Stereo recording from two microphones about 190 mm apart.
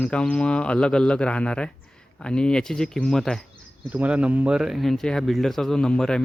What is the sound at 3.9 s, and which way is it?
Speech, 5° right (ahead or behind).